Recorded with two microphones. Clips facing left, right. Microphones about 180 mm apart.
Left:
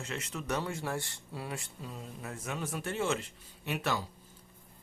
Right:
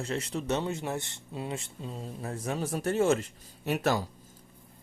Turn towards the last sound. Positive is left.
turn(degrees=-40)  # may be behind; listen again after turning